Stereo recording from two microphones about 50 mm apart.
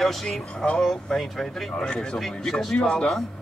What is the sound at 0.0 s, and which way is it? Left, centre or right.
Speech, centre.